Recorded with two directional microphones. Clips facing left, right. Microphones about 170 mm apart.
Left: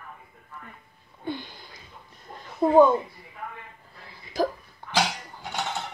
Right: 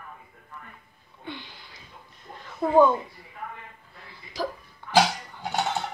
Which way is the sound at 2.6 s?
15° left (ahead or behind).